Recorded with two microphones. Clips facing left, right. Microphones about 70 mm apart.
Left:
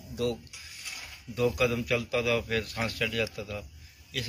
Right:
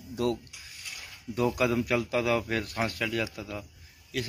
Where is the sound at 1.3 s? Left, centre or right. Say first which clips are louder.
Right 1 dB; right.